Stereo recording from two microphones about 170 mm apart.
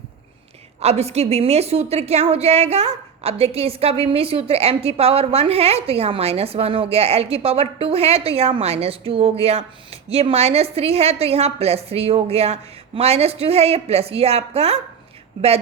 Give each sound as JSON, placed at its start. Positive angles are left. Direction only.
{"t": 0.8, "sound": "a woman's voice", "side_deg": -40}